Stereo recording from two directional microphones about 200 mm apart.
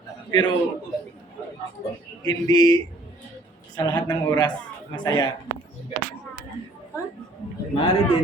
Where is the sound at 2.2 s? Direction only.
20° left (ahead or behind).